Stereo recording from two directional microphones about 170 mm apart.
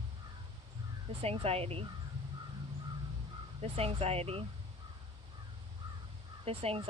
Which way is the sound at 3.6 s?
35° right (ahead or behind).